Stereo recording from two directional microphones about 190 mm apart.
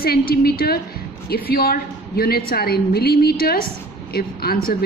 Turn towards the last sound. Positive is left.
turn(degrees=50)  # may be behind; listen again after turning